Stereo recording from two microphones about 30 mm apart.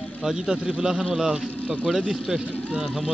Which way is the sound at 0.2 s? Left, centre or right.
Centre.